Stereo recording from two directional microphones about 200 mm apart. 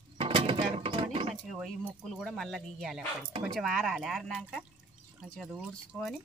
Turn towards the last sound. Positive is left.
turn(degrees=0)  # may be behind; listen again after turning